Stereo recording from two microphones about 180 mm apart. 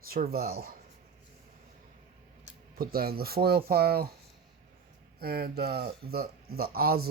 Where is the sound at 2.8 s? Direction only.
55° right (ahead or behind).